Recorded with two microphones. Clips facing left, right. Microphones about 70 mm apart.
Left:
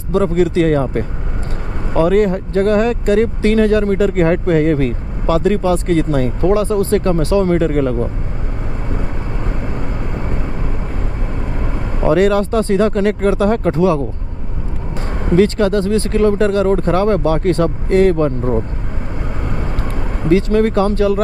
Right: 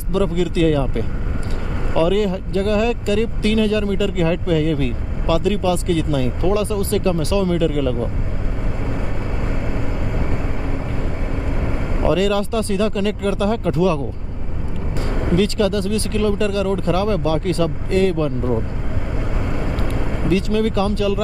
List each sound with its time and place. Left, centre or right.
0.1 s speech: left
12.0 s speech: left
15.1 s speech: left
20.2 s speech: left